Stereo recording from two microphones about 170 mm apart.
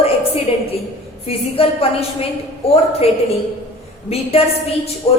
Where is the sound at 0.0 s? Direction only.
35° left (ahead or behind).